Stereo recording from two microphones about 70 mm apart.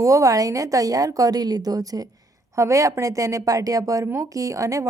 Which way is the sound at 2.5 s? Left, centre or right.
Right.